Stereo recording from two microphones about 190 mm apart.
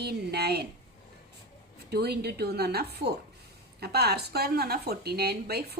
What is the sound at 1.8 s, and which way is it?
A woman's voice, 55° right (ahead or behind).